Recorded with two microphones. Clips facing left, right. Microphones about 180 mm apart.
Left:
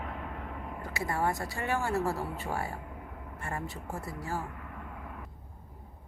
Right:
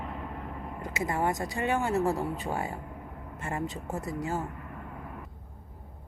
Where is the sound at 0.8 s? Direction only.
20° right (ahead or behind).